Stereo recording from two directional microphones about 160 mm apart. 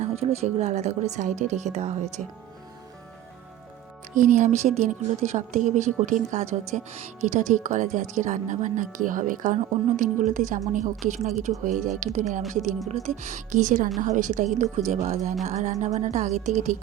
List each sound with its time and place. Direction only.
0.0 s speech: 45° right (ahead or behind)
2.2 s speech: centre (ahead or behind)
4.1 s a woman's voice: 50° right (ahead or behind)